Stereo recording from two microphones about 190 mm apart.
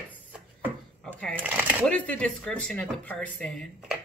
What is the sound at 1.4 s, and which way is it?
Speech, 10° right (ahead or behind).